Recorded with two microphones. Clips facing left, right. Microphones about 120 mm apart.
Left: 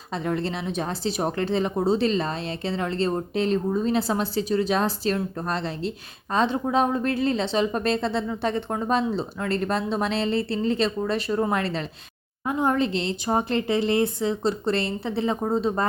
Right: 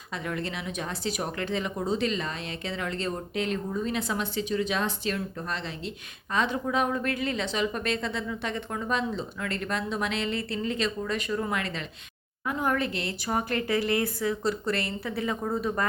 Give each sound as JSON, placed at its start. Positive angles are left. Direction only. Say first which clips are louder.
{"t": 0.1, "sound": "speech", "louder": "left 6 dB", "side_deg": 30}
{"t": 12.5, "sound": "a woman's voice", "louder": "left 5 dB", "side_deg": 25}